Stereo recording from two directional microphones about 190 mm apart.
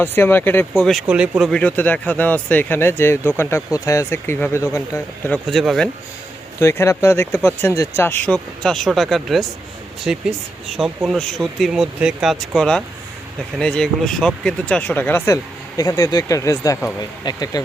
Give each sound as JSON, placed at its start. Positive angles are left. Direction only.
{"t": 0.0, "sound": "speech", "side_deg": 10}
{"t": 0.7, "sound": "speech", "side_deg": 0}
{"t": 5.5, "sound": "speech", "side_deg": 0}
{"t": 6.6, "sound": "speech", "side_deg": 15}